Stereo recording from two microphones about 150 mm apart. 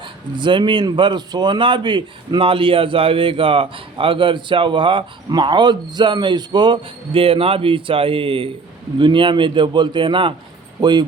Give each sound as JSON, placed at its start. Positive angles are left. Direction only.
{"t": 0.0, "sound": "speech", "side_deg": -30}